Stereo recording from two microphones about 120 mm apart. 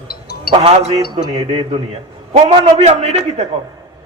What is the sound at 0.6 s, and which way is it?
A man's voice, 60° right (ahead or behind).